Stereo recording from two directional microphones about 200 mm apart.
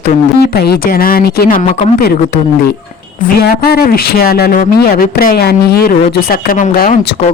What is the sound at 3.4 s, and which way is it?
Speech, 50° left (ahead or behind).